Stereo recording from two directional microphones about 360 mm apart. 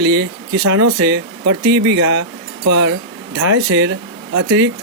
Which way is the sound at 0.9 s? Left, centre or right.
Right.